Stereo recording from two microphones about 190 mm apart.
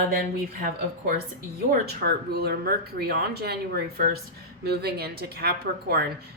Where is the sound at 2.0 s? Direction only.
55° right (ahead or behind).